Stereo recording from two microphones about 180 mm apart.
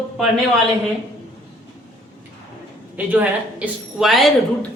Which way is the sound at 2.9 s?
10° right (ahead or behind).